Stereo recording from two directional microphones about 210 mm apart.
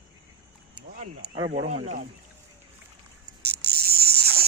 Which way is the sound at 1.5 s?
30° right (ahead or behind).